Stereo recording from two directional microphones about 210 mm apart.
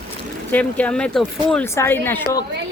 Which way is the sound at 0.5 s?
5° left (ahead or behind).